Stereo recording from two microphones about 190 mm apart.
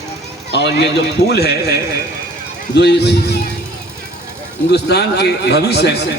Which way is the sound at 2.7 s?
60° left (ahead or behind).